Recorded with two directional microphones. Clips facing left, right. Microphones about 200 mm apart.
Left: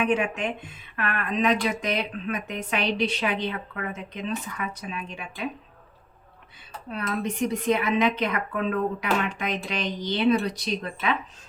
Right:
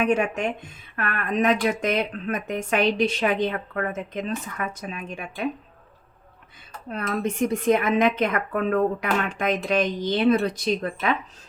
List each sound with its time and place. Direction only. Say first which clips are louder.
0.0 s speech: right 2 dB; 45° right (ahead or behind)
6.9 s speech: right 2 dB; 50° right (ahead or behind)